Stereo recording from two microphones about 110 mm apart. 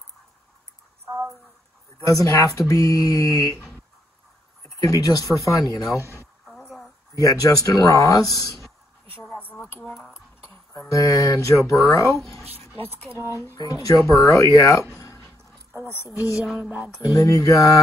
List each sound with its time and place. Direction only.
2.0 s speech: 30° left (ahead or behind)
4.8 s speech: 30° left (ahead or behind)
6.4 s a sound: centre (ahead or behind)
7.2 s speech: 30° left (ahead or behind)
9.7 s speech: 20° left (ahead or behind)
10.7 s speech: 30° left (ahead or behind)
13.6 s speech: 35° left (ahead or behind)
15.0 s a sound: 25° left (ahead or behind)
16.1 s speech: 5° right (ahead or behind)
17.1 s speech: 30° left (ahead or behind)